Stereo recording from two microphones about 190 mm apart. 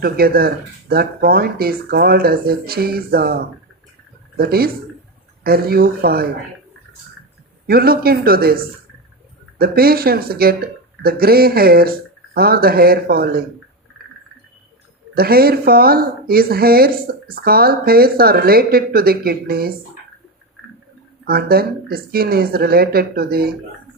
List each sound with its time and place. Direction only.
0.0 s speech: 50° right (ahead or behind)
4.4 s speech: 55° right (ahead or behind)
7.7 s speech: 55° right (ahead or behind)
15.1 s speech: 55° right (ahead or behind)
21.2 s speech: 50° right (ahead or behind)